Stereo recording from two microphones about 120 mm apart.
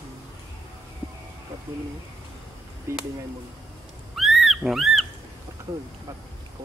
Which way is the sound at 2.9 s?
25° right (ahead or behind).